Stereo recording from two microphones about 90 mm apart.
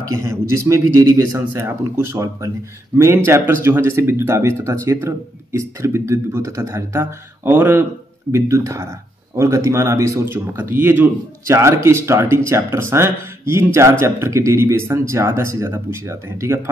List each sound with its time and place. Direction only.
0.1 s speech: 30° right (ahead or behind)